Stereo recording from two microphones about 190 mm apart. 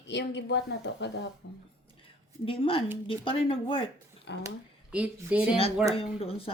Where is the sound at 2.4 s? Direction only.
30° left (ahead or behind).